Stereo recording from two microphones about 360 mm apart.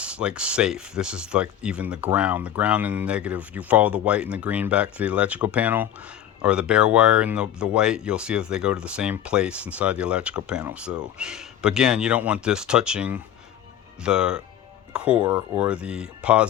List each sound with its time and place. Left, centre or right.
0.0 s speech: centre